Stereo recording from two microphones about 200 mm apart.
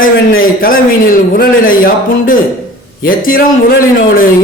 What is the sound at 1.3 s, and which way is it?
A man's voice, 45° left (ahead or behind).